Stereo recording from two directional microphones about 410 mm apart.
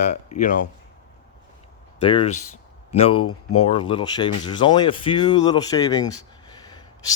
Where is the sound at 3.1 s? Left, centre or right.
Left.